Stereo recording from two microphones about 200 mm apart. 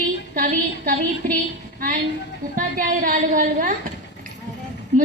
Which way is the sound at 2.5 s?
45° right (ahead or behind).